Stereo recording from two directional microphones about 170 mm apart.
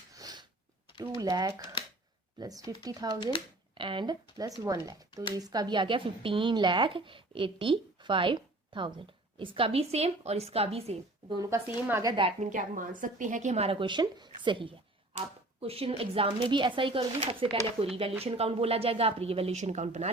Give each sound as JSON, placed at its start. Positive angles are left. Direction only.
{"t": 0.1, "sound": "a sound", "side_deg": -20}
{"t": 0.9, "sound": "speech", "side_deg": -25}
{"t": 11.9, "sound": "a woman's voice", "side_deg": -15}
{"t": 12.1, "sound": "speech", "side_deg": -30}
{"t": 12.5, "sound": "a woman's voice", "side_deg": -50}